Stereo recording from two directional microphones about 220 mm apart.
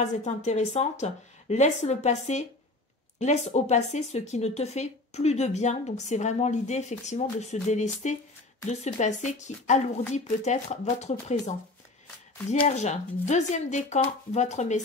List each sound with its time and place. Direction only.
0.0 s speech: 30° left (ahead or behind)